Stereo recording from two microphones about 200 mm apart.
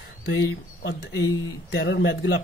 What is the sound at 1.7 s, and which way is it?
Speech, 60° left (ahead or behind).